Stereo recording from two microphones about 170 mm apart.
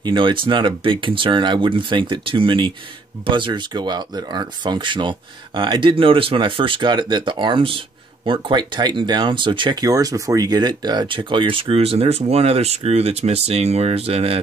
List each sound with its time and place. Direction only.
0.0 s speech: 30° right (ahead or behind)